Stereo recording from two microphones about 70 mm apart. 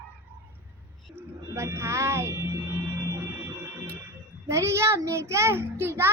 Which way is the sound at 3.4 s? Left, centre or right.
Right.